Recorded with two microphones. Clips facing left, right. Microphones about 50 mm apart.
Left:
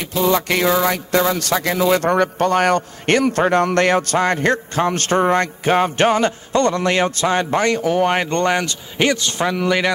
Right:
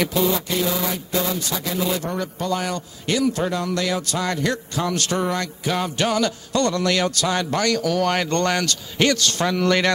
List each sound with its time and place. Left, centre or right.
0.2 s speech: left; by 9.9 s centre